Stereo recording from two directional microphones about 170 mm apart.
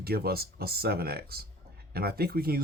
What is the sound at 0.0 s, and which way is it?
Speech, 65° right (ahead or behind).